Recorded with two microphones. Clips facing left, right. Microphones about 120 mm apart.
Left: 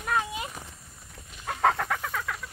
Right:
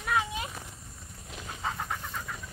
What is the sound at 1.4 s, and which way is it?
Chicken, 70° left (ahead or behind).